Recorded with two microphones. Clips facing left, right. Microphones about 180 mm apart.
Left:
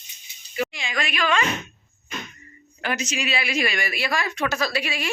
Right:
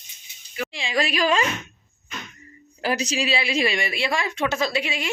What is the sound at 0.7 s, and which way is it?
Speech, 30° right (ahead or behind).